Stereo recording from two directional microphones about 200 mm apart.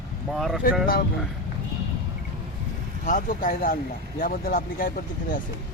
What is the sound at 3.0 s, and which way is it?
Speech, 45° left (ahead or behind).